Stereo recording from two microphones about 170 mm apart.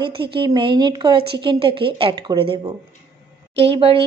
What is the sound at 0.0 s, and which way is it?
A woman's voice, 30° right (ahead or behind).